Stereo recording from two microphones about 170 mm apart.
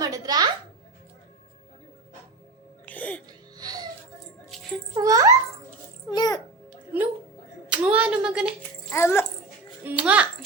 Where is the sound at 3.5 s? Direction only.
25° right (ahead or behind).